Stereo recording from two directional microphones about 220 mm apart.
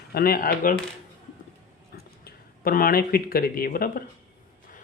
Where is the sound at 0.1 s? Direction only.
40° left (ahead or behind).